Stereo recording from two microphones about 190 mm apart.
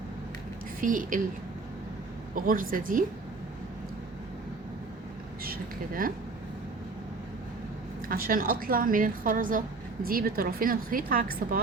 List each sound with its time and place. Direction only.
0.8 s a woman's voice: 45° right (ahead or behind)
2.3 s a woman's voice: 50° right (ahead or behind)
5.4 s a sound: 50° right (ahead or behind)
8.0 s a woman's voice: 50° right (ahead or behind)